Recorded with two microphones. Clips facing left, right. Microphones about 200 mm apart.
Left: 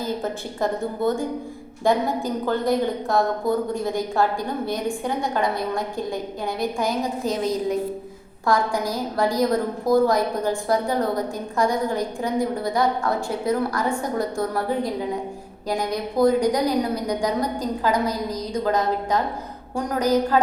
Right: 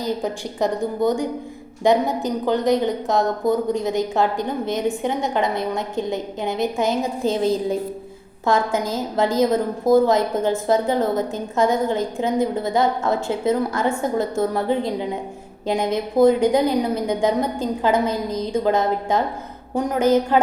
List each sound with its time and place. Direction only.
0.0 s a woman's voice: 15° right (ahead or behind)